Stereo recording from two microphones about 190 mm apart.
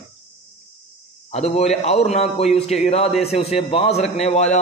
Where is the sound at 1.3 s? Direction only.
35° left (ahead or behind).